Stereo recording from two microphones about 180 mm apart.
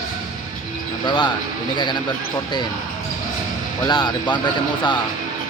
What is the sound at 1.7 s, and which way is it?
Speech, 25° left (ahead or behind).